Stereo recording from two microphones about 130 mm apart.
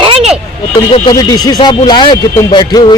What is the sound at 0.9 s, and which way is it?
Speech, 35° left (ahead or behind).